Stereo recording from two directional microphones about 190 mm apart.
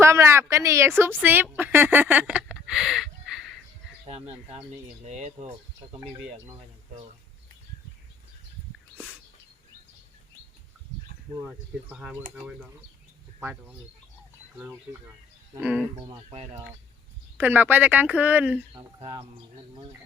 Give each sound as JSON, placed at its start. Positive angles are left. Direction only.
{"t": 0.0, "sound": "speech", "side_deg": -15}
{"t": 5.0, "sound": "speech", "side_deg": -35}
{"t": 11.3, "sound": "speech", "side_deg": -10}
{"t": 13.4, "sound": "speech", "side_deg": -5}
{"t": 16.0, "sound": "speech", "side_deg": -30}
{"t": 17.3, "sound": "speech", "side_deg": -10}
{"t": 19.0, "sound": "speech", "side_deg": -25}